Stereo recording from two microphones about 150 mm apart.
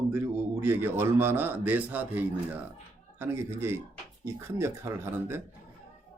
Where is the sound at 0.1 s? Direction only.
15° right (ahead or behind).